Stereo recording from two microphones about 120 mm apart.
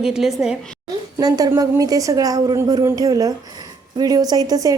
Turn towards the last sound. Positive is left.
turn(degrees=-30)  # may be behind; listen again after turning